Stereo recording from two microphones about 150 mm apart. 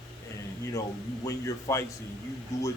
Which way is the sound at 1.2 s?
20° left (ahead or behind).